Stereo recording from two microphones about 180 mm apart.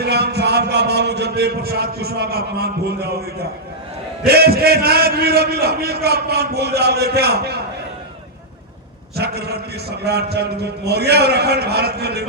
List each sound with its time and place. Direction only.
0.0 s a man's voice: 65° right (ahead or behind)
4.3 s a man's voice: 60° right (ahead or behind)
9.1 s a man's voice: 65° right (ahead or behind)